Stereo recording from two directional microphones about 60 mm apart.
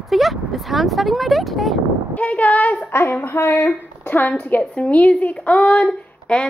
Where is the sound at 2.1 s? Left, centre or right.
Left.